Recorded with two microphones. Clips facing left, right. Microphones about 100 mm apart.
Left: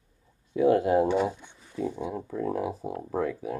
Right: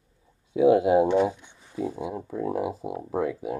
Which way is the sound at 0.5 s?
15° right (ahead or behind).